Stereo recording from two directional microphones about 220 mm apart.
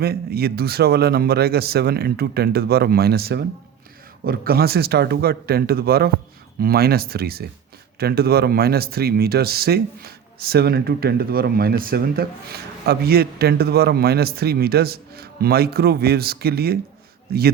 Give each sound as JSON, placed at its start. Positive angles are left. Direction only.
{"t": 0.0, "sound": "speech", "side_deg": -45}